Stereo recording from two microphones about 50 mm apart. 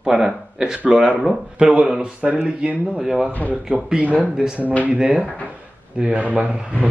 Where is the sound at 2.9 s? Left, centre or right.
Centre.